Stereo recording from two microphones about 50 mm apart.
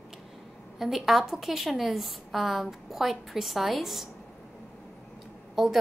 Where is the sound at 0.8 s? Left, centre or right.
Centre.